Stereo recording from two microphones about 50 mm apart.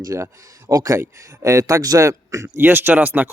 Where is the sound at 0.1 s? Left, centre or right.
Right.